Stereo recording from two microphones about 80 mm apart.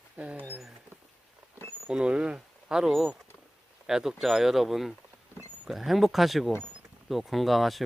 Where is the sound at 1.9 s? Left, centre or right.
Centre.